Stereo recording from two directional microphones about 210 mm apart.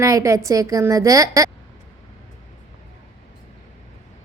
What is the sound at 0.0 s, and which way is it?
A woman's voice, 15° right (ahead or behind).